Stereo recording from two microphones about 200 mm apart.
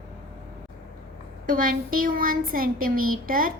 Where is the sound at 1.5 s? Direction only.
45° right (ahead or behind).